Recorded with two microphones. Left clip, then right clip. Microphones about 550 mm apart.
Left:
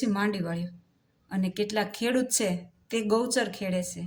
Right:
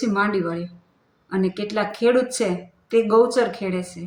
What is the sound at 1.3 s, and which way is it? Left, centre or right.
Speech, left.